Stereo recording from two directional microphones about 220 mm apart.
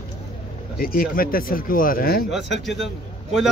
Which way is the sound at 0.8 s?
40° left (ahead or behind).